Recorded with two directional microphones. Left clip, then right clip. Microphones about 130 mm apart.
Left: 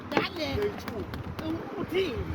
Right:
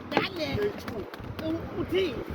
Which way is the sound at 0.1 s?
40° right (ahead or behind).